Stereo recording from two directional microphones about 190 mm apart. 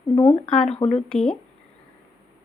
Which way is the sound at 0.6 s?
35° left (ahead or behind).